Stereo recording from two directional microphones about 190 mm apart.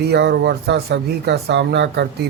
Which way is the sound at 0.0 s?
60° right (ahead or behind).